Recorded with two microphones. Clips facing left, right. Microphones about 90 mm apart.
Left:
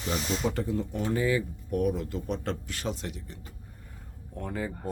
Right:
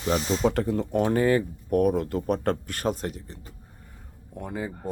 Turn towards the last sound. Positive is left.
turn(degrees=-15)  # may be behind; listen again after turning